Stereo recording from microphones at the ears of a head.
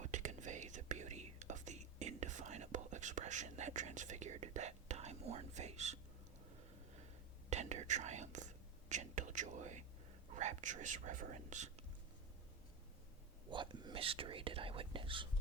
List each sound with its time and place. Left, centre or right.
0.0 s whispering: right
7.5 s whispering: right
13.5 s whispering: right